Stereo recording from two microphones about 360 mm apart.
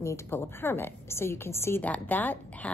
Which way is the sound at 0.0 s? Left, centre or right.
Centre.